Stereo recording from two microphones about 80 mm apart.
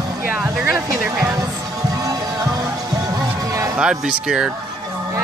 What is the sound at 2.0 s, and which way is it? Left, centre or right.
Music, right.